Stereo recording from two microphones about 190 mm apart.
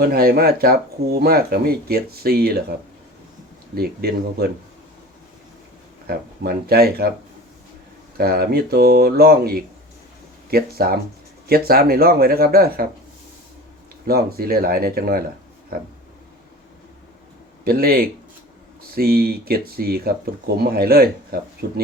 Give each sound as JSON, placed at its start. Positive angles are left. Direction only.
{"t": 0.0, "sound": "speech", "side_deg": -50}
{"t": 3.8, "sound": "speech", "side_deg": -55}
{"t": 6.1, "sound": "speech", "side_deg": -55}
{"t": 8.2, "sound": "speech", "side_deg": -55}
{"t": 14.1, "sound": "speech", "side_deg": -55}
{"t": 17.7, "sound": "speech", "side_deg": -50}